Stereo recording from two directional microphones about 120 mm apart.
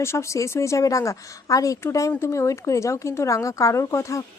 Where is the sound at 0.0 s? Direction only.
25° left (ahead or behind).